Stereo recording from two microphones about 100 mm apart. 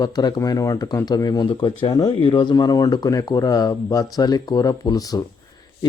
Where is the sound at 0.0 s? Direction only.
40° left (ahead or behind).